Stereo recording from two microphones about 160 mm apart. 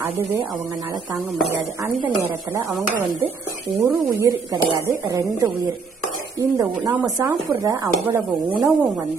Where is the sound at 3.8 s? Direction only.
15° right (ahead or behind).